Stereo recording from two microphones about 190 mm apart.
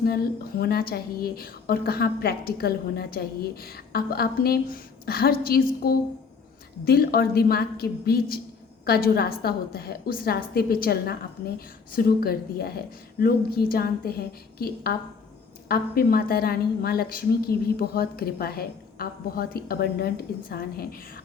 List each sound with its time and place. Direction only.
0.0 s a woman's voice: 55° left (ahead or behind)